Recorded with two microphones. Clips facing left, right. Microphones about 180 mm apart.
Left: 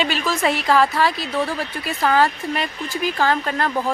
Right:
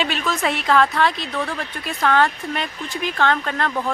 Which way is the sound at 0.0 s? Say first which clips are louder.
Left 2 dB; centre (ahead or behind).